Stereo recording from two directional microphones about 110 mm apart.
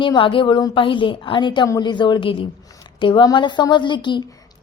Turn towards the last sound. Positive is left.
turn(degrees=45)  # may be behind; listen again after turning